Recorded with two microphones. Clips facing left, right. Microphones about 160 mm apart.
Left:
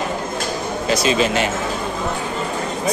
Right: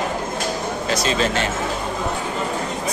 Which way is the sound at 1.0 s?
10° left (ahead or behind).